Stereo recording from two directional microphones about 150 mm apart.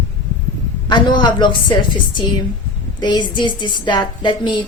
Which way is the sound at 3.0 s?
30° left (ahead or behind).